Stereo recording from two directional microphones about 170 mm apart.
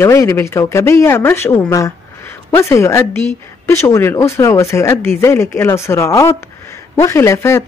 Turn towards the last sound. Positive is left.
turn(degrees=15)  # may be behind; listen again after turning